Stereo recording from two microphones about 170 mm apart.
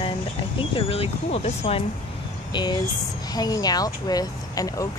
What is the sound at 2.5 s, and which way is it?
Speech, 25° left (ahead or behind).